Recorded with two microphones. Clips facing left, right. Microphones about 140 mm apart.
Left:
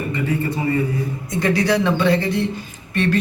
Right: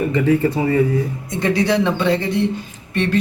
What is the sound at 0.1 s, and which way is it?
Speech, 90° right.